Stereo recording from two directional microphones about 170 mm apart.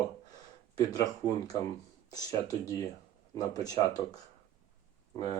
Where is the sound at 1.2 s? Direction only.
20° left (ahead or behind).